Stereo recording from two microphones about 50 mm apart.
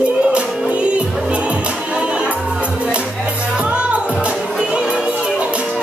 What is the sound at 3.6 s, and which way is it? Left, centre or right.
Music, right.